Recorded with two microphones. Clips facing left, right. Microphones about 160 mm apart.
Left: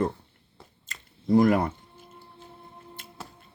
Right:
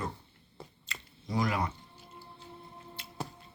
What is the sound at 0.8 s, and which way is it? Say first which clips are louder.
Music: left 16 dB; 50° left (ahead or behind).